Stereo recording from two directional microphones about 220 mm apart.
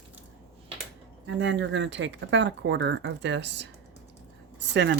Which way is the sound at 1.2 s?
55° right (ahead or behind).